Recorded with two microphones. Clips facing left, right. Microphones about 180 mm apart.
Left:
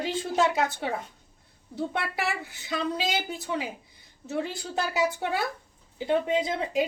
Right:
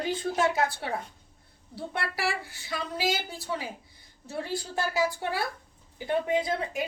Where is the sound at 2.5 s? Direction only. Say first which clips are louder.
Left 5 dB; 20° left (ahead or behind).